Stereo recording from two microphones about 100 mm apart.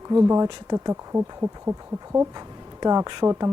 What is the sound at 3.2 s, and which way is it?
Speech, 35° right (ahead or behind).